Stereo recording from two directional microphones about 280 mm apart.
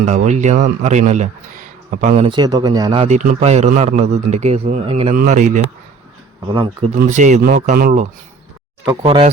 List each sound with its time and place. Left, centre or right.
0.0 s a man's voice: right
9.0 s a man's voice: centre